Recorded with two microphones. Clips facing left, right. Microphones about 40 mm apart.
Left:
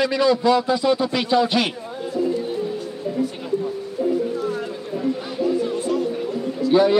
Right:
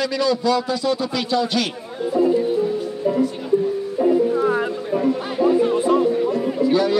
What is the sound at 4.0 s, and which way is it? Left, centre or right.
Chatter, right.